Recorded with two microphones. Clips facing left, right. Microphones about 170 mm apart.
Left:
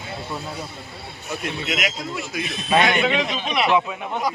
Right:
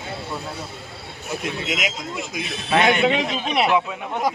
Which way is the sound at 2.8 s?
30° right (ahead or behind).